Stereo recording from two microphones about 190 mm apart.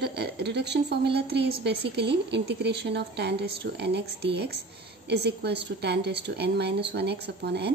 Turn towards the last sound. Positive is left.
turn(degrees=-60)  # may be behind; listen again after turning